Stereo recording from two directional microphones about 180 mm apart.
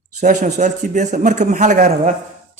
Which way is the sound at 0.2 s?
40° right (ahead or behind).